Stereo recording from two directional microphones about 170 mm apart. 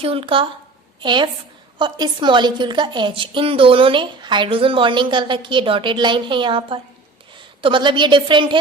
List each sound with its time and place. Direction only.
0.0 s a woman's voice: 30° right (ahead or behind)